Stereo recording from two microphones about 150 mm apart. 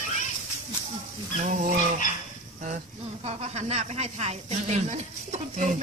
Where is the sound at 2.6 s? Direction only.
50° right (ahead or behind).